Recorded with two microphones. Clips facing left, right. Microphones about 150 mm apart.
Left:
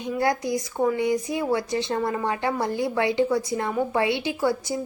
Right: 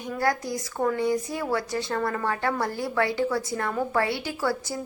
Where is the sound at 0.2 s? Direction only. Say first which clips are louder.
Left 2 dB; 20° left (ahead or behind).